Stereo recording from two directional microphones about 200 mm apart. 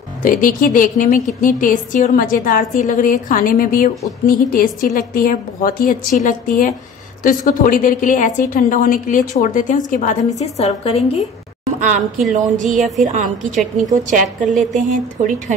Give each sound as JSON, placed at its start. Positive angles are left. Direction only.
{"t": 0.2, "sound": "a woman's voice", "side_deg": 40}
{"t": 11.8, "sound": "a woman's voice", "side_deg": -40}
{"t": 14.4, "sound": "a sound", "side_deg": 0}
{"t": 14.7, "sound": "a woman's voice", "side_deg": -40}